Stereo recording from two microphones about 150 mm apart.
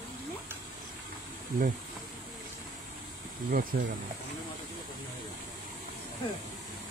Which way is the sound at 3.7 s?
90° right.